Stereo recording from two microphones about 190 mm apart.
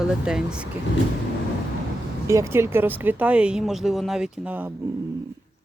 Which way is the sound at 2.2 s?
15° right (ahead or behind).